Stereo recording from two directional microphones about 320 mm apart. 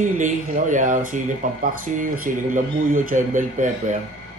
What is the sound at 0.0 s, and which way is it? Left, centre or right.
Speech, right.